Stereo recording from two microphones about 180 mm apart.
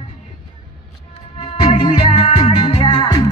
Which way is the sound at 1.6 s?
35° left (ahead or behind).